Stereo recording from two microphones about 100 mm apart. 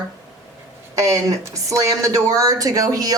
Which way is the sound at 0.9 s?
30° right (ahead or behind).